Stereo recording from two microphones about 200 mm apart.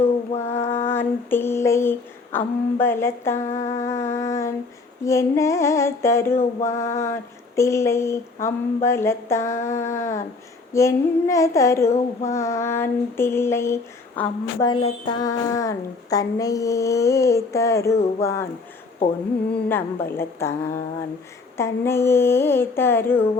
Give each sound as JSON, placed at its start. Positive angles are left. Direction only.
{"t": 0.3, "sound": "female singing", "side_deg": 15}
{"t": 3.6, "sound": "humming", "side_deg": 35}
{"t": 3.8, "sound": "humming", "side_deg": 15}
{"t": 5.0, "sound": "female singing", "side_deg": 15}
{"t": 14.6, "sound": "female singing", "side_deg": 25}
{"t": 19.6, "sound": "female singing", "side_deg": 10}